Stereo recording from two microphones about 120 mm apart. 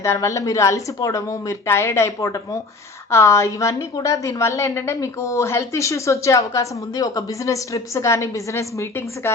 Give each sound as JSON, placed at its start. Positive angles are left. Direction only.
{"t": 0.0, "sound": "a woman's voice", "side_deg": 25}